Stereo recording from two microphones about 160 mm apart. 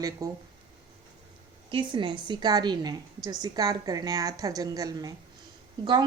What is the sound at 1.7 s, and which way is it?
A woman's voice, 30° right (ahead or behind).